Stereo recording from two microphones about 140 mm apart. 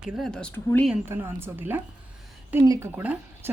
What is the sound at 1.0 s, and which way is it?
A woman's voice, 15° right (ahead or behind).